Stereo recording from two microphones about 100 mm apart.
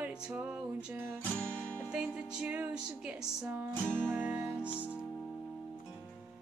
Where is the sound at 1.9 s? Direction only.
10° right (ahead or behind).